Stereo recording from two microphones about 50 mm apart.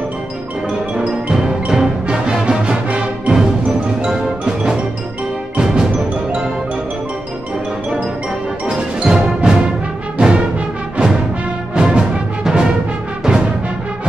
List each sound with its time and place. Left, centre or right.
0.7 s music: centre
3.6 s music: centre
8.6 s music: centre
11.7 s music: centre